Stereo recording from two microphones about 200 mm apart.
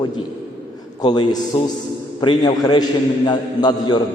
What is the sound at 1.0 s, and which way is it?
A man's voice, 20° left (ahead or behind).